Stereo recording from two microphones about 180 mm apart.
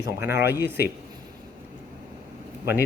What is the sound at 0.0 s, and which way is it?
Speech, 15° right (ahead or behind).